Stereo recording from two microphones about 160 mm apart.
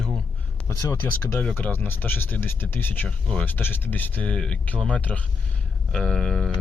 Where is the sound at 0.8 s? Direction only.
20° left (ahead or behind).